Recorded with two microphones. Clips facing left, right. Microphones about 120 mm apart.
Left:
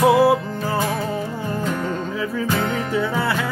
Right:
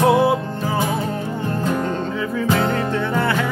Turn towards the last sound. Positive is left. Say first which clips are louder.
# right 1 dB
turn(degrees=5)  # may be behind; listen again after turning